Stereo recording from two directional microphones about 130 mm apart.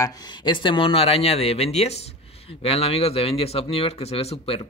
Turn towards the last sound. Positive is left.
turn(degrees=45)  # may be behind; listen again after turning